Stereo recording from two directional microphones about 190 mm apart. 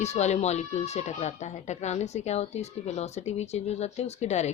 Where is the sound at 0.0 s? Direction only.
35° left (ahead or behind).